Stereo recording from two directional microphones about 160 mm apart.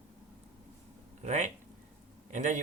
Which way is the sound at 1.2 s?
45° right (ahead or behind).